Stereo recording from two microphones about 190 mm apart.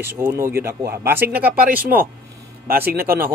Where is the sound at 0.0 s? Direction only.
10° right (ahead or behind).